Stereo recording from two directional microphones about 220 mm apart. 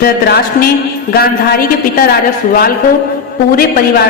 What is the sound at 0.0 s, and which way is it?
Speech, 45° left (ahead or behind).